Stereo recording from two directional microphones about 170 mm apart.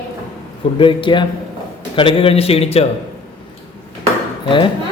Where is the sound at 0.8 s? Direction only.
30° left (ahead or behind).